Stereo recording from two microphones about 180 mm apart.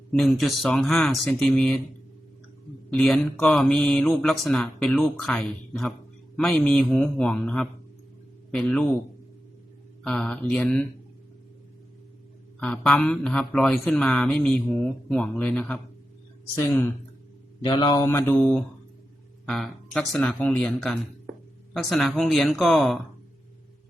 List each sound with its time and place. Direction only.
0.1 s speech: centre (ahead or behind)
2.9 s speech: centre (ahead or behind)
10.0 s speech: 5° left (ahead or behind)
12.5 s speech: 5° left (ahead or behind)
17.7 s a man's voice: 25° left (ahead or behind)
18.0 s speech: 15° left (ahead or behind)
19.5 s speech: centre (ahead or behind)